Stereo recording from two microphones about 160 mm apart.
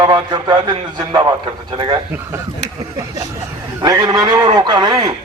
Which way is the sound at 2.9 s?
20° right (ahead or behind).